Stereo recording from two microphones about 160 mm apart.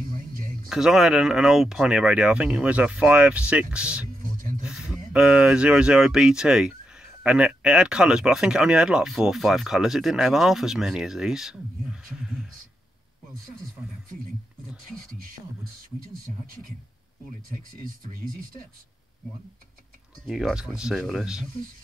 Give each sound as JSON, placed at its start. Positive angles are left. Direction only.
{"t": 0.0, "sound": "a sound", "side_deg": -65}
{"t": 0.7, "sound": "speech", "side_deg": 0}
{"t": 17.8, "sound": "speech", "side_deg": -65}
{"t": 20.2, "sound": "speech", "side_deg": 0}